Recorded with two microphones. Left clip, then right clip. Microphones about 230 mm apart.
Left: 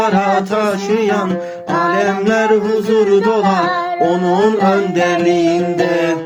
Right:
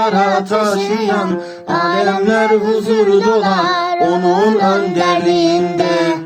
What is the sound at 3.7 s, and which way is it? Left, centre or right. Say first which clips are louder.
Music: right 2 dB; right.